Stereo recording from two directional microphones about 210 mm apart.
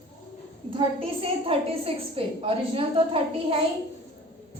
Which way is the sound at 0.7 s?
25° right (ahead or behind).